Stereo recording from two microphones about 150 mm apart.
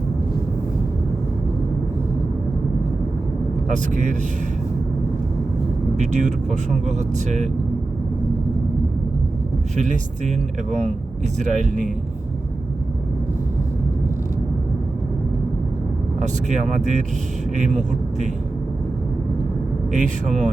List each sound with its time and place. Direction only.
6.0 s speech: 50° right (ahead or behind)
9.7 s speech: 55° right (ahead or behind)
11.3 s speech: 55° right (ahead or behind)
16.2 s speech: 55° right (ahead or behind)
19.9 s speech: 55° right (ahead or behind)